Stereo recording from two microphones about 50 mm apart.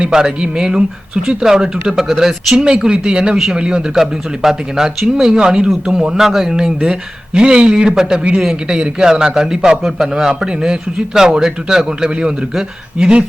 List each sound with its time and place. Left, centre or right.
0.0 s a man's voice: centre
4.0 s a man's voice: centre
6.2 s a man's voice: centre